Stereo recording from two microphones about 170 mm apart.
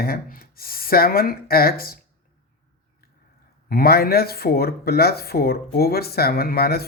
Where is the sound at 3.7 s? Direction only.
65° left (ahead or behind).